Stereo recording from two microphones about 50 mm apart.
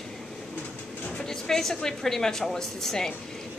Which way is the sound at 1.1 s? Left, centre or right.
Centre.